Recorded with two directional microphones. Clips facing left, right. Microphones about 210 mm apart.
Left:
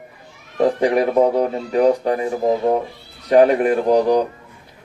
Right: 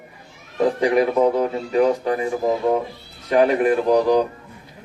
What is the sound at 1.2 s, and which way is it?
Speech, 40° left (ahead or behind).